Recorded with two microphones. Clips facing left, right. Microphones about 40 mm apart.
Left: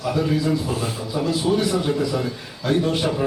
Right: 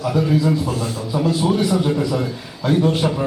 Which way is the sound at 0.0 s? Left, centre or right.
Centre.